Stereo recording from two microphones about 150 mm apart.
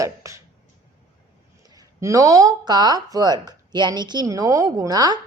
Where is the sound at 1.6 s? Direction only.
25° right (ahead or behind).